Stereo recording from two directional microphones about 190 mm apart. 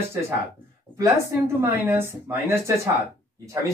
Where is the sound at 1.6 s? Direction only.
15° right (ahead or behind).